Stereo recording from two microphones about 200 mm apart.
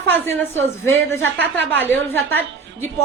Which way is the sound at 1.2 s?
60° right (ahead or behind).